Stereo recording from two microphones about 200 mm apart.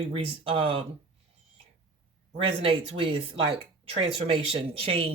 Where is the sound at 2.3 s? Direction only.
30° right (ahead or behind).